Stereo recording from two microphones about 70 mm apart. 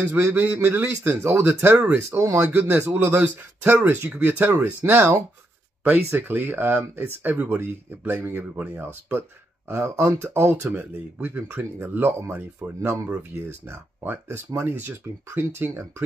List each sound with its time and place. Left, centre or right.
0.3 s speech: right
2.9 s speech: right
9.7 s speech: right